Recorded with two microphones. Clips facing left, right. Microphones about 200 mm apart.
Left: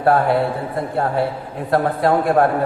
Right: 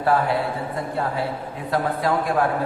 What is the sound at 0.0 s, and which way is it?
Speech, 55° left (ahead or behind).